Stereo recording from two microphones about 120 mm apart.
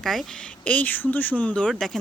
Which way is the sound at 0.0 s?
5° left (ahead or behind).